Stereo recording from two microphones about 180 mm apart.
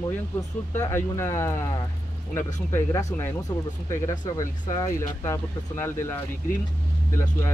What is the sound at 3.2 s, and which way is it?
Speech, 15° left (ahead or behind).